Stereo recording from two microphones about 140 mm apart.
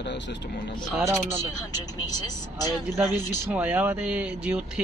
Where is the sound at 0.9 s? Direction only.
20° right (ahead or behind).